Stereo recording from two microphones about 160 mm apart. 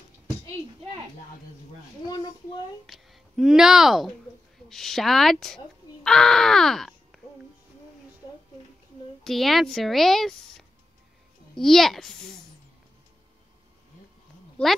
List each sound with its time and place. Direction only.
2.0 s speech: 25° left (ahead or behind)
2.9 s speech: centre (ahead or behind)
9.2 s speech: centre (ahead or behind)
11.5 s speech: centre (ahead or behind)
14.6 s speech: 5° left (ahead or behind)